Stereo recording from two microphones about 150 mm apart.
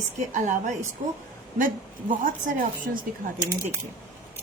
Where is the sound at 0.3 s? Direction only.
60° right (ahead or behind).